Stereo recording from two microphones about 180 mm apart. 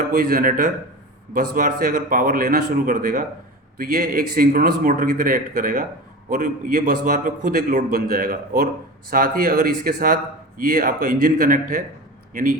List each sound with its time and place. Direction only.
0.2 s a man's voice: 50° right (ahead or behind)